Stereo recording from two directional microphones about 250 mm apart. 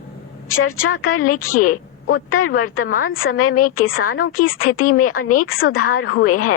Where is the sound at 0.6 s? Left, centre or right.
Left.